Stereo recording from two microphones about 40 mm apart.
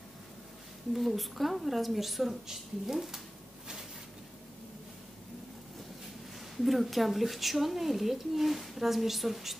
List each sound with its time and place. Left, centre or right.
0.9 s speech: centre
6.5 s speech: centre